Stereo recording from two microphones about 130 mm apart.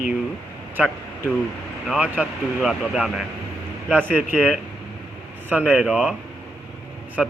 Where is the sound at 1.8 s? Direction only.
5° right (ahead or behind).